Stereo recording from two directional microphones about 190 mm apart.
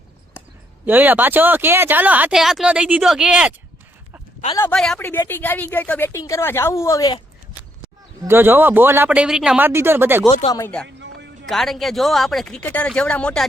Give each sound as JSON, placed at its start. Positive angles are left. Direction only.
{"t": 0.9, "sound": "speech", "side_deg": -10}
{"t": 4.4, "sound": "speech", "side_deg": 15}
{"t": 4.7, "sound": "speech", "side_deg": 5}
{"t": 8.2, "sound": "speech", "side_deg": -10}
{"t": 10.8, "sound": "music", "side_deg": -70}
{"t": 11.4, "sound": "speech", "side_deg": 0}